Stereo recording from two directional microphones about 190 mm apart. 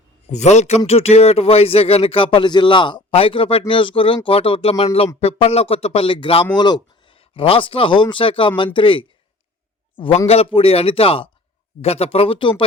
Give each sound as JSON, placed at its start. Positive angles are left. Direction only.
{"t": 0.3, "sound": "speech", "side_deg": 35}
{"t": 10.2, "sound": "speech", "side_deg": 30}